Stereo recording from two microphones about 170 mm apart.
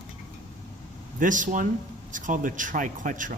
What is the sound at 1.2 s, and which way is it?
Speech, 50° right (ahead or behind).